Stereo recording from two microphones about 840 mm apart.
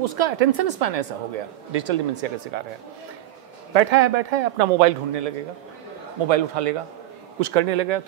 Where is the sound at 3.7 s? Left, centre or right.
Right.